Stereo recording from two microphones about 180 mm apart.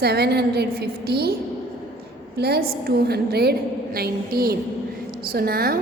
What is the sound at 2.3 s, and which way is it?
A woman's voice, 60° right (ahead or behind).